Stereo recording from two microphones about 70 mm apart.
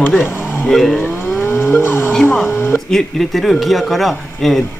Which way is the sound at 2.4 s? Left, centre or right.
Left.